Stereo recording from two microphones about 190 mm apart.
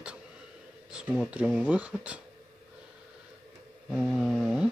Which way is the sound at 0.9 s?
Centre (ahead or behind).